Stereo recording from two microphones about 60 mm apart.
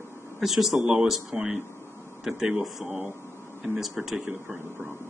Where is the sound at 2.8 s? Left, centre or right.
Right.